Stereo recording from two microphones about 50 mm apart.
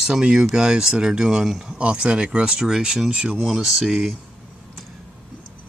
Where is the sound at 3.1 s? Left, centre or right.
Right.